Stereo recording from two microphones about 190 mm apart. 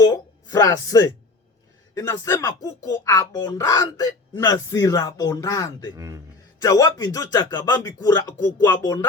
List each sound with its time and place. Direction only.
0.0 s a sound: 20° left (ahead or behind)
2.0 s speech: 15° left (ahead or behind)
6.0 s a man's voice: 15° right (ahead or behind)
6.6 s speech: 15° left (ahead or behind)